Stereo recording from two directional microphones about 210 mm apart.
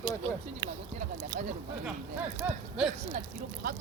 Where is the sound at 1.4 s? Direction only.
40° right (ahead or behind).